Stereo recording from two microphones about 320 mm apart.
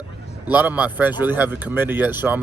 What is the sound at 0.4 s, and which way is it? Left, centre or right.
Speech, centre.